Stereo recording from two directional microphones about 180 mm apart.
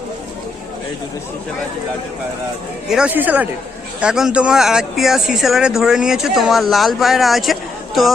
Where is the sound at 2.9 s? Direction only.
5° right (ahead or behind).